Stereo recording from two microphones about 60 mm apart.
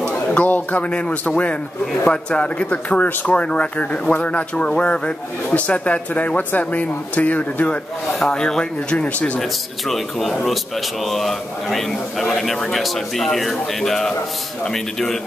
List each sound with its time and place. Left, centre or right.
0.3 s a man's voice: left
8.2 s speech: centre
9.4 s a man's voice: centre